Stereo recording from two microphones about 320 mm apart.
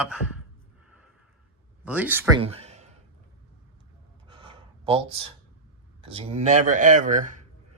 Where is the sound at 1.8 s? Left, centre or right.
Centre; by 2.9 s right.